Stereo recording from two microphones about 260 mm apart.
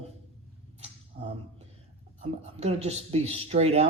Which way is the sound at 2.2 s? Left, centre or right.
Right.